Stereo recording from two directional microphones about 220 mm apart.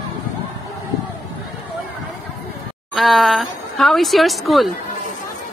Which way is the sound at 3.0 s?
Centre (ahead or behind).